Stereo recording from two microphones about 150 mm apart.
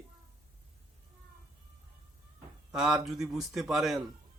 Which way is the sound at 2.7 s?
5° right (ahead or behind).